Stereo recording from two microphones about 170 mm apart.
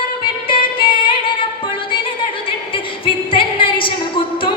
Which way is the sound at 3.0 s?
30° left (ahead or behind).